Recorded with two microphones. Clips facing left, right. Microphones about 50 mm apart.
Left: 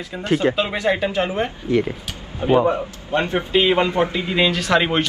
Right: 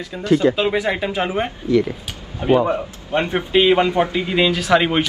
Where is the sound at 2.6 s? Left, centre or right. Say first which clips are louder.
Left 1 dB; centre.